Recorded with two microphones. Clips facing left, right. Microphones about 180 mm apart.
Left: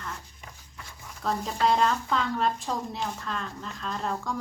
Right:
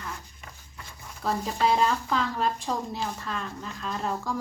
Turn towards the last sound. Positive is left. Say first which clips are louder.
# right 1 dB
turn(degrees=-5)  # may be behind; listen again after turning